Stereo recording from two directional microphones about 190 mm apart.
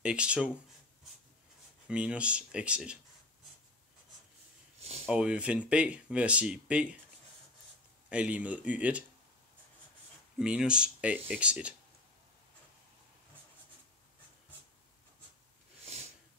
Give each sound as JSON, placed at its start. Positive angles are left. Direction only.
{"t": 0.0, "sound": "speech", "side_deg": -5}
{"t": 1.9, "sound": "speech", "side_deg": -5}
{"t": 4.7, "sound": "a sound", "side_deg": -35}
{"t": 5.0, "sound": "speech", "side_deg": -5}
{"t": 8.1, "sound": "speech", "side_deg": -5}
{"t": 10.4, "sound": "speech", "side_deg": -5}
{"t": 15.8, "sound": "sniff", "side_deg": -35}